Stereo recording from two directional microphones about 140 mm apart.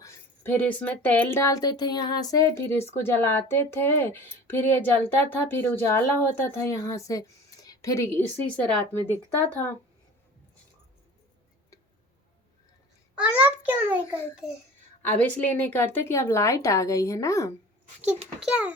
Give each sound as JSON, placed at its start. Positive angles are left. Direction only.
{"t": 0.0, "sound": "speech", "side_deg": 15}
{"t": 8.5, "sound": "speech", "side_deg": 10}
{"t": 13.1, "sound": "a sound", "side_deg": -10}
{"t": 15.2, "sound": "a woman's voice", "side_deg": 10}
{"t": 18.3, "sound": "a child's voice", "side_deg": -5}